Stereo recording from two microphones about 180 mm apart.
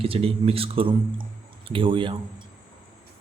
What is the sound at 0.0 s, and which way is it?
Speech, 30° right (ahead or behind).